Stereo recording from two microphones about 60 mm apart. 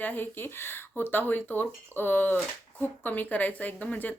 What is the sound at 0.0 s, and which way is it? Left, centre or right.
Speech, left.